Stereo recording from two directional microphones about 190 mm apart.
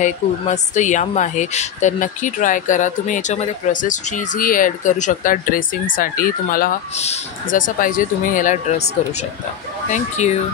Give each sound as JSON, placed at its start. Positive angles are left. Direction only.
{"t": 0.0, "sound": "a woman's voice", "side_deg": 40}
{"t": 9.8, "sound": "a woman's voice", "side_deg": 40}